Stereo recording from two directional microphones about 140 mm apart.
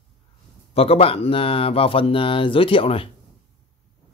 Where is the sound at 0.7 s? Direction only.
45° left (ahead or behind).